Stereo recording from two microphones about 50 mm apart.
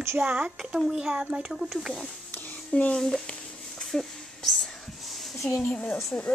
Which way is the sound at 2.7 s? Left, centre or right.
Left.